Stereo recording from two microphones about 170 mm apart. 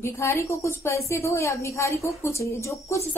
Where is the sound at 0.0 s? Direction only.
15° left (ahead or behind).